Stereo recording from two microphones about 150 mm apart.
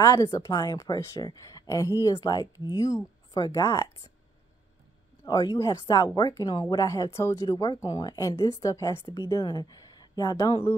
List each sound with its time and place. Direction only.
0.0 s speech: 20° left (ahead or behind)
5.2 s speech: 25° left (ahead or behind)